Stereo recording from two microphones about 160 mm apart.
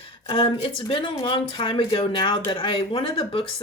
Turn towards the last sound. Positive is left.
turn(degrees=35)  # may be behind; listen again after turning